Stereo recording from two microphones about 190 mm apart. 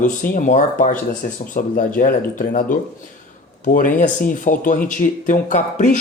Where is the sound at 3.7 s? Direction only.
45° left (ahead or behind).